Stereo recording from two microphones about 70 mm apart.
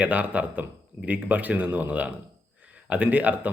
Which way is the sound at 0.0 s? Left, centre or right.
Right.